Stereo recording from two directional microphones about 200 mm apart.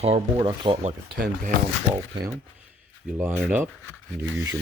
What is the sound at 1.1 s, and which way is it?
Speech, 45° right (ahead or behind).